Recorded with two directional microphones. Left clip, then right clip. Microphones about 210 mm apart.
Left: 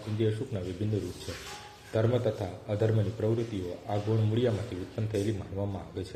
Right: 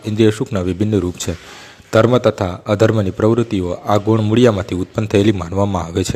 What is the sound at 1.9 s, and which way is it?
A man's voice, 60° right (ahead or behind).